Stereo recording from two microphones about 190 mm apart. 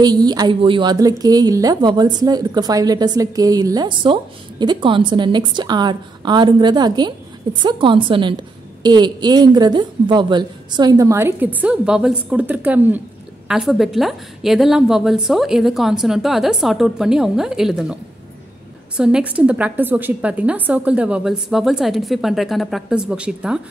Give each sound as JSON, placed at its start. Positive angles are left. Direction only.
{"t": 0.0, "sound": "a woman's voice", "side_deg": -20}
{"t": 18.9, "sound": "a woman's voice", "side_deg": -5}